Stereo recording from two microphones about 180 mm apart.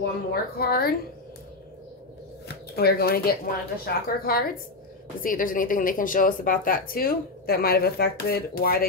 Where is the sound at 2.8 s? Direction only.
60° left (ahead or behind).